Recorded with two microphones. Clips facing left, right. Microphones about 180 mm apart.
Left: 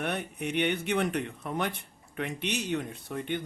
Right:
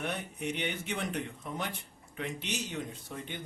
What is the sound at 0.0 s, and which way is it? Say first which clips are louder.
Speech: left 3 dB; 65° left (ahead or behind).